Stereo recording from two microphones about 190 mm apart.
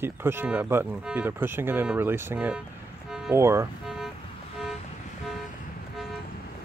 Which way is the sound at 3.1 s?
5° right (ahead or behind).